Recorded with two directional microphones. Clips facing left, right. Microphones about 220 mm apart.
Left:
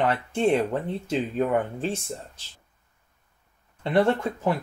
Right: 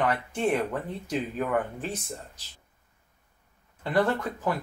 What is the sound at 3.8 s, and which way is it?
Speech, 25° left (ahead or behind).